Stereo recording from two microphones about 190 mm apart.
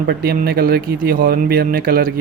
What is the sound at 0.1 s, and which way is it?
Speech, 55° right (ahead or behind).